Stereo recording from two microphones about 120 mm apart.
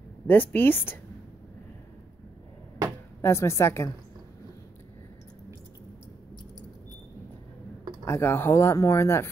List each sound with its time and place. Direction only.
0.3 s a woman's voice: 15° left (ahead or behind)
3.2 s speech: 20° left (ahead or behind)
8.0 s speech: 20° left (ahead or behind)